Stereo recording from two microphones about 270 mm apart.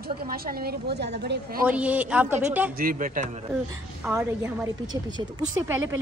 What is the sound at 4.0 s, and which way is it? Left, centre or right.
A woman's voice, centre.